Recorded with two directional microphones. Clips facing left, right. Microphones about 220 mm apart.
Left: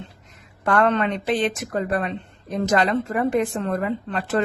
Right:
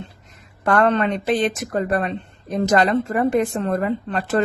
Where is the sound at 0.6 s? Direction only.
40° right (ahead or behind).